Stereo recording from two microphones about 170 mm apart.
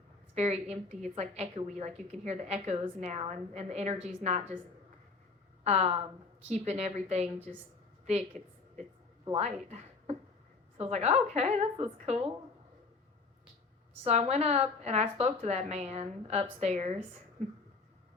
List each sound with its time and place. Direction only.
0.3 s a woman's voice: 40° right (ahead or behind)
5.6 s a woman's voice: 40° right (ahead or behind)
8.4 s a woman's voice: 5° left (ahead or behind)
9.3 s a woman's voice: 40° right (ahead or behind)
14.0 s a woman's voice: 40° right (ahead or behind)